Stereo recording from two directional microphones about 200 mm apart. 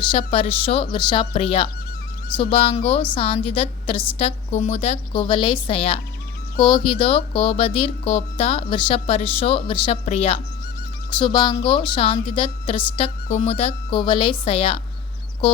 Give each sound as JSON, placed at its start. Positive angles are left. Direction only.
{"t": 0.1, "sound": "speech", "side_deg": 25}